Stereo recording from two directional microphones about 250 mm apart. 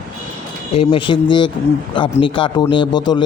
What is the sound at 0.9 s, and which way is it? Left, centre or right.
Speech, centre.